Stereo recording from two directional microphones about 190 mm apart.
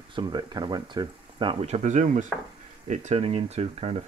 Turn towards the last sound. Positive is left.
turn(degrees=-35)  # may be behind; listen again after turning